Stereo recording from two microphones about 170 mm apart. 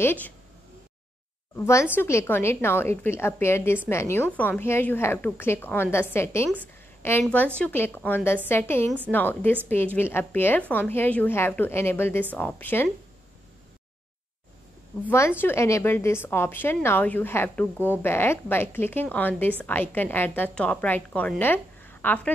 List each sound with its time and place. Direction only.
0.0 s a woman's voice: 10° left (ahead or behind)
1.6 s a woman's voice: 15° left (ahead or behind)
15.0 s a woman's voice: 15° left (ahead or behind)